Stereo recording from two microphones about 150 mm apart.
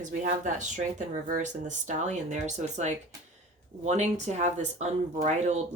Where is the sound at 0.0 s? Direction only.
55° right (ahead or behind).